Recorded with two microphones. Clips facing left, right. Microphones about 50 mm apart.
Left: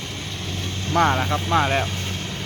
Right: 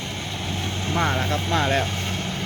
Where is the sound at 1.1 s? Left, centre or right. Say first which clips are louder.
Left 3 dB; centre.